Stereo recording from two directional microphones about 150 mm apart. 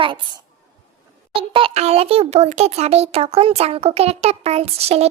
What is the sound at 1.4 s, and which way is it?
A child's voice, 35° right (ahead or behind).